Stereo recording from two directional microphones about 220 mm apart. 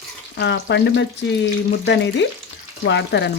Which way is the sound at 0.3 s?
50° left (ahead or behind).